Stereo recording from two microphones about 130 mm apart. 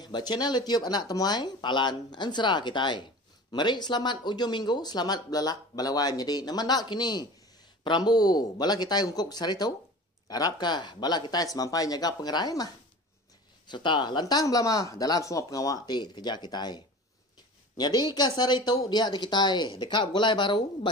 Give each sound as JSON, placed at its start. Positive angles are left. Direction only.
{"t": 0.0, "sound": "speech", "side_deg": 35}